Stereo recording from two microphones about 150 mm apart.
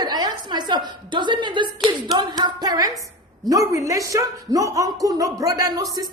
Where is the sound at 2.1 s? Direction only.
30° right (ahead or behind).